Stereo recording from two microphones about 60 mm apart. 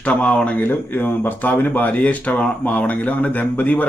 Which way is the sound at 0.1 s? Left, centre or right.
Left.